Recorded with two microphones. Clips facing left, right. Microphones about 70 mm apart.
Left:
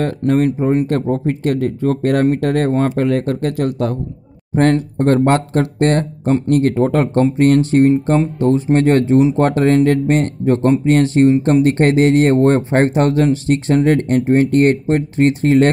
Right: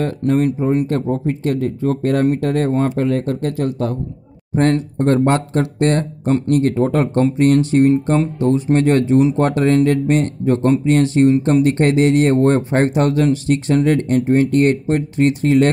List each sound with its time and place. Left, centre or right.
0.2 s speech: left
0.8 s speech: left
4.9 s speech: left